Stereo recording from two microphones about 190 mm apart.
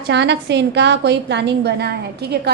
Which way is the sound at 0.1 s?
65° right (ahead or behind).